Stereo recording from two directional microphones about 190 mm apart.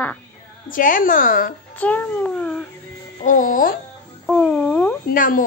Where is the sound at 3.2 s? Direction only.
45° left (ahead or behind).